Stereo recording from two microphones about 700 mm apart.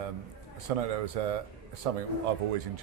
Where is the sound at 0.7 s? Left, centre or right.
Right.